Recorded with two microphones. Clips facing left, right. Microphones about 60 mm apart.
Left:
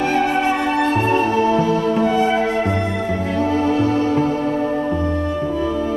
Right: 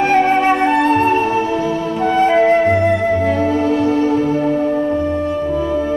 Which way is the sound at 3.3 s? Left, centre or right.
Centre.